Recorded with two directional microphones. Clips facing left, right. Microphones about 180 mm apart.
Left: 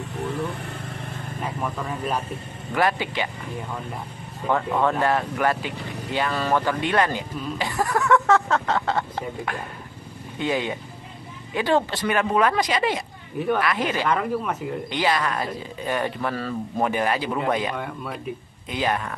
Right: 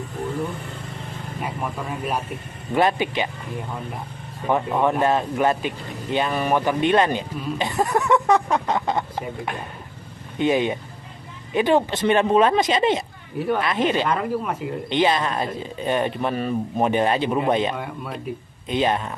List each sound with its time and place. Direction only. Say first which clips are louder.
1.4 s speech: even; 10° right (ahead or behind)
2.7 s speech: right 3 dB; 20° right (ahead or behind)
4.5 s speech: right 2 dB; 15° right (ahead or behind)
14.0 s speech: even; 10° right (ahead or behind)
14.9 s speech: right 4 dB; 25° right (ahead or behind)
17.7 s speech: even; 5° right (ahead or behind)
18.7 s speech: right 4 dB; 25° right (ahead or behind)